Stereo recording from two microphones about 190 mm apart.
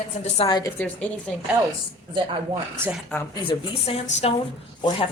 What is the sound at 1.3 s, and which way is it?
Speech, 5° left (ahead or behind).